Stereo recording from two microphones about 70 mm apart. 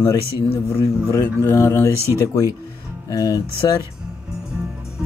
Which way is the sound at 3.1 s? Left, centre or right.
Left.